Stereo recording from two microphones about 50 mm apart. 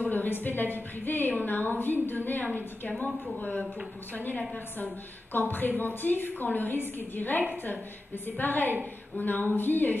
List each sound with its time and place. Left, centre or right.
0.0 s a woman's voice: left